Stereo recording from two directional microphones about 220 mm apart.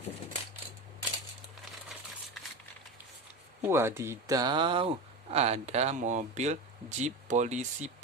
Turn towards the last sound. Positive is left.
turn(degrees=-30)  # may be behind; listen again after turning